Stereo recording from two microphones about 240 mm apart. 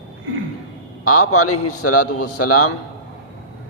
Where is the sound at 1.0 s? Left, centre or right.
Left.